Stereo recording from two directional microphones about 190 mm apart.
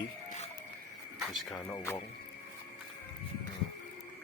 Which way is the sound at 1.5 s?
15° left (ahead or behind).